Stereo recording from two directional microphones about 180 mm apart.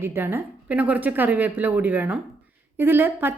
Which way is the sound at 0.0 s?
10° right (ahead or behind).